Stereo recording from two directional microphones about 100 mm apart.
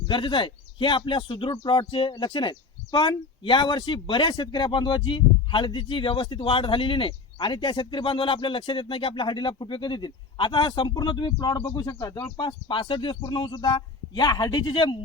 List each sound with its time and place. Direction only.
0.1 s speech: 55° left (ahead or behind)